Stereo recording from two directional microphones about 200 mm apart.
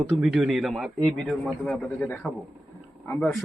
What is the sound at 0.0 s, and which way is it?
A man's voice, 5° right (ahead or behind).